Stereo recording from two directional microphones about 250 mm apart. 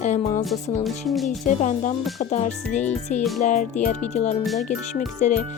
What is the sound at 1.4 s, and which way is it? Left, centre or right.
Speech, left.